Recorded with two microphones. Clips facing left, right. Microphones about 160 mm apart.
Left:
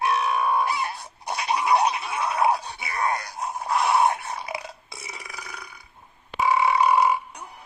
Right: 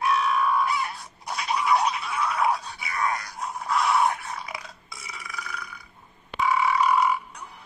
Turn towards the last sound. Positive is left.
turn(degrees=25)  # may be behind; listen again after turning